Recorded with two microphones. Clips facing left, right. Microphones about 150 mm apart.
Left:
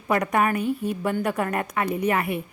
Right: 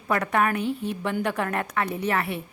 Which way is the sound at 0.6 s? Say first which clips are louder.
Left 2 dB; 45° left (ahead or behind).